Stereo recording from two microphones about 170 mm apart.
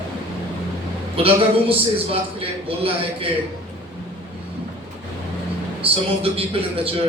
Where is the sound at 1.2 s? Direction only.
35° right (ahead or behind).